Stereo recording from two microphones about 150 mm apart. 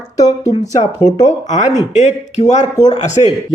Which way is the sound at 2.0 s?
50° left (ahead or behind).